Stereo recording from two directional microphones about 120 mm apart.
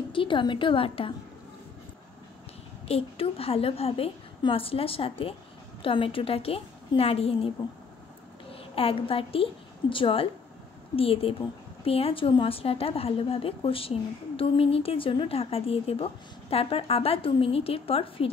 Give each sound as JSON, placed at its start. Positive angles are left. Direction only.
{"t": 0.1, "sound": "a woman's voice", "side_deg": 45}
{"t": 2.9, "sound": "a woman's voice", "side_deg": 55}